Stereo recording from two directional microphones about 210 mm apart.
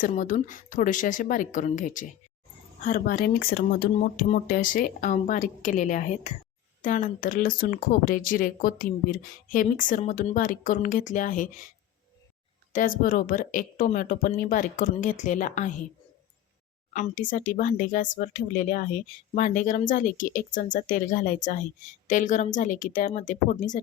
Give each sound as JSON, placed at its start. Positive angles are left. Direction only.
{"t": 0.1, "sound": "speech", "side_deg": 35}
{"t": 12.7, "sound": "speech", "side_deg": 40}
{"t": 16.9, "sound": "speech", "side_deg": 40}